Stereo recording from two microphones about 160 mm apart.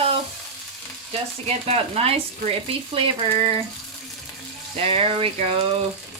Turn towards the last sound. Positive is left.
turn(degrees=-40)  # may be behind; listen again after turning